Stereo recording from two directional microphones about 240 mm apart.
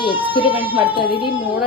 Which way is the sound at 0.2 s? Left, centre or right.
Centre.